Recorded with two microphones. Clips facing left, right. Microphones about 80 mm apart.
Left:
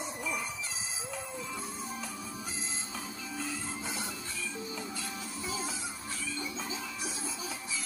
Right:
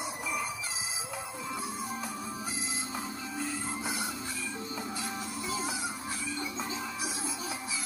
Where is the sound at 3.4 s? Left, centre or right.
Centre.